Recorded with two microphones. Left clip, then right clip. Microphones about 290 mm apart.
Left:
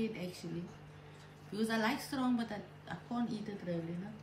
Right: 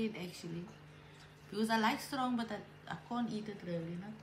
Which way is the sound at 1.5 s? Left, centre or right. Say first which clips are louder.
Right 2 dB; centre.